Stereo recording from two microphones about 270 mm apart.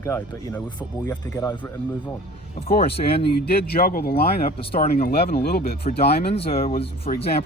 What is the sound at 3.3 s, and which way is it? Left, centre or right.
Speech, left.